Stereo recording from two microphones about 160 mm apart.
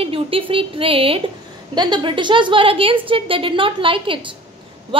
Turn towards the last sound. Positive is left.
turn(degrees=-30)  # may be behind; listen again after turning